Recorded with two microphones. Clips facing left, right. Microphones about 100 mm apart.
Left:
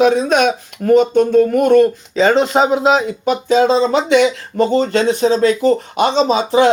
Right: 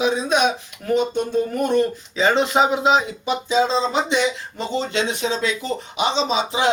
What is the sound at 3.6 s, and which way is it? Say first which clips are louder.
Speech: left 5 dB; 70° left (ahead or behind).